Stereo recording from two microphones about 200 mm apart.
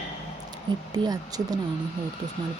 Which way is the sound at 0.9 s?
20° right (ahead or behind).